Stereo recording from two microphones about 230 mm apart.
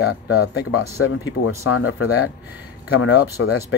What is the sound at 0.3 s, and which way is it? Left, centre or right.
Speech, left.